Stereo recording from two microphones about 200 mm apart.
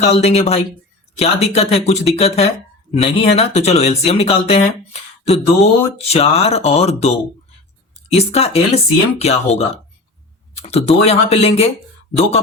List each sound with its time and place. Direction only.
0.0 s speech: 30° left (ahead or behind)
8.1 s speech: 30° left (ahead or behind)